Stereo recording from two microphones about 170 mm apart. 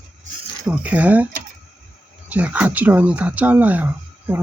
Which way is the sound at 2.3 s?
10° right (ahead or behind).